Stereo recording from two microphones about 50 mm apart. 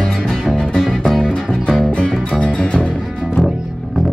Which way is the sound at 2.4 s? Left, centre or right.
Left.